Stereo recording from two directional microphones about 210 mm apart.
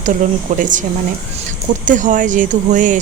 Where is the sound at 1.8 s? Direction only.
35° right (ahead or behind).